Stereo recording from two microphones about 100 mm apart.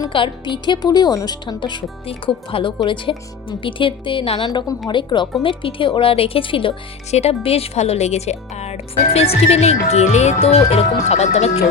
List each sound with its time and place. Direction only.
0.1 s a woman's voice: 55° left (ahead or behind)
2.0 s a woman's voice: 65° left (ahead or behind); by 11.6 s 90° left